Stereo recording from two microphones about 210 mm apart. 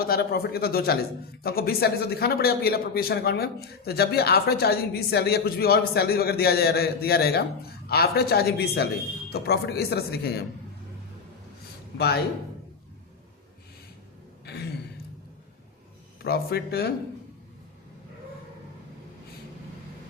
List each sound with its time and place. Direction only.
0.0 s a man's voice: 45° left (ahead or behind)
11.9 s a man's voice: 50° left (ahead or behind)
14.4 s a sound: 50° left (ahead or behind)
16.2 s a man's voice: 50° left (ahead or behind)